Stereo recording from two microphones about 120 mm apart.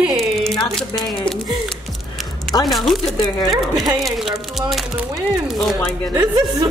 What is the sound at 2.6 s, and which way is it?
Speech, centre (ahead or behind).